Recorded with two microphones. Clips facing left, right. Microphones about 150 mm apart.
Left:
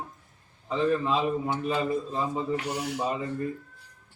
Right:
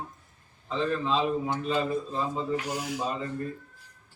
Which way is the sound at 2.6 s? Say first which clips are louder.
Left 1 dB; 65° left (ahead or behind).